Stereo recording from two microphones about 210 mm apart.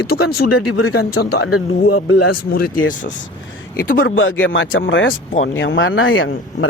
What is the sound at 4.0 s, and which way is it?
Speech, 65° left (ahead or behind).